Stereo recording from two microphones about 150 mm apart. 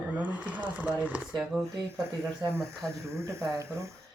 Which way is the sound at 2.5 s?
15° right (ahead or behind).